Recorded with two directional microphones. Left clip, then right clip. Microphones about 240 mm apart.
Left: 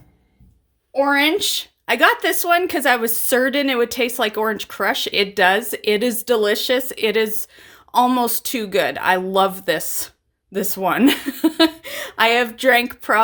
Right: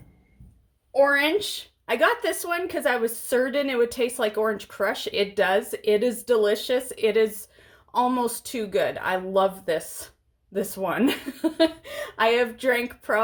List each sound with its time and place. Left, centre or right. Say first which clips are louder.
1.1 s speech: left 5 dB; left